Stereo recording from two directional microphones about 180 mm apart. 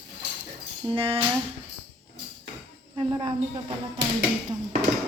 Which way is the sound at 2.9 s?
30° right (ahead or behind).